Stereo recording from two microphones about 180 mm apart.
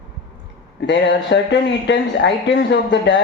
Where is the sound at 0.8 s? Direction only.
75° left (ahead or behind).